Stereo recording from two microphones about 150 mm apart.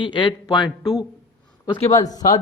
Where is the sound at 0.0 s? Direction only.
30° left (ahead or behind).